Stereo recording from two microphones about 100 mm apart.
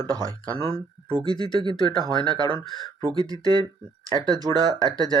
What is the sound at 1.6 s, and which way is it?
Speech, 50° right (ahead or behind).